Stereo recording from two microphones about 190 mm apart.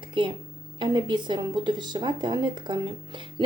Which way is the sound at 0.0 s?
25° right (ahead or behind).